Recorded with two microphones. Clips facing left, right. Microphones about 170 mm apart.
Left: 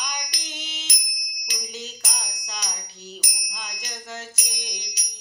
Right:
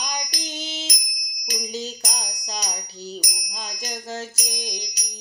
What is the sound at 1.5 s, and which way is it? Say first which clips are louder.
Music: right 7 dB; 40° right (ahead or behind).